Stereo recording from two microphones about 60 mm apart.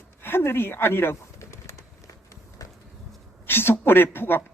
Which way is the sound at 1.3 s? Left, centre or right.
Left.